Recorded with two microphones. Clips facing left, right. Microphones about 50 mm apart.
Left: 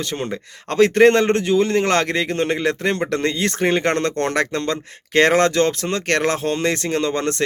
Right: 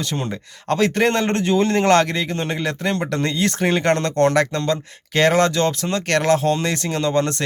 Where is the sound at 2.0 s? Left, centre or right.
Left.